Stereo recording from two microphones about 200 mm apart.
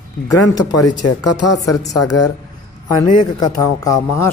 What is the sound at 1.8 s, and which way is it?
A man's voice, 20° left (ahead or behind).